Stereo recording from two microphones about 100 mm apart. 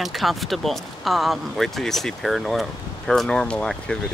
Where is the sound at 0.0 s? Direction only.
Centre (ahead or behind).